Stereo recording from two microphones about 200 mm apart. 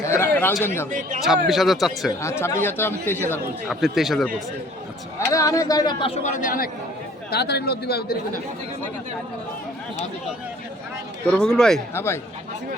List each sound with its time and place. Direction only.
0.0 s a sound: 10° left (ahead or behind)
0.6 s speech: 10° left (ahead or behind)
0.9 s a man's voice: 40° right (ahead or behind)
1.5 s a man's voice: centre (ahead or behind)
2.2 s speech: 10° left (ahead or behind)
3.7 s a man's voice: centre (ahead or behind)
5.3 s speech: 15° left (ahead or behind)
6.4 s speech: 45° left (ahead or behind)
11.3 s a man's voice: 5° left (ahead or behind)